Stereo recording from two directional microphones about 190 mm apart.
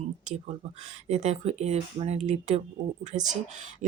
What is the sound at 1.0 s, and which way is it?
Speech, 35° right (ahead or behind).